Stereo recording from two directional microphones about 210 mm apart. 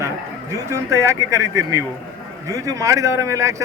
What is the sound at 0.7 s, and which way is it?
A man's voice, 15° right (ahead or behind).